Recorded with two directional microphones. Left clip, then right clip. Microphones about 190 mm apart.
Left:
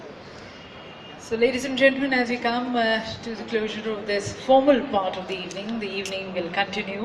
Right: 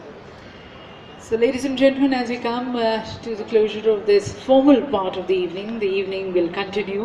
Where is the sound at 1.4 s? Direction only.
50° right (ahead or behind).